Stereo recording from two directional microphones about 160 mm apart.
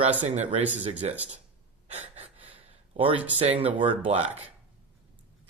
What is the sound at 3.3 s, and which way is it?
Speech, 40° right (ahead or behind).